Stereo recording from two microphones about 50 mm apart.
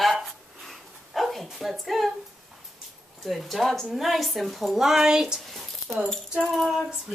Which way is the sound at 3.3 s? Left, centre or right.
Centre.